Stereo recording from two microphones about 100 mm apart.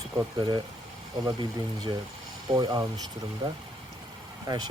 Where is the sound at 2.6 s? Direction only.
40° right (ahead or behind).